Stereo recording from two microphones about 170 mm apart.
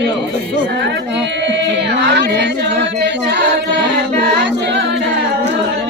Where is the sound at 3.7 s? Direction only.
85° right.